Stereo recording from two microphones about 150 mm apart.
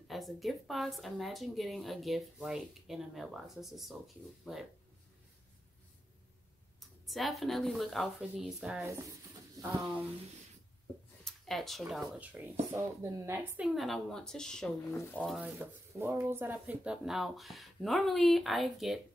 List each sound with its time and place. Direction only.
0.1 s a woman's voice: centre (ahead or behind)
6.8 s a woman's voice: centre (ahead or behind)
11.2 s a sound: centre (ahead or behind)
11.9 s speech: 5° right (ahead or behind)
13.6 s a woman's voice: centre (ahead or behind)
15.6 s a woman's voice: 15° right (ahead or behind)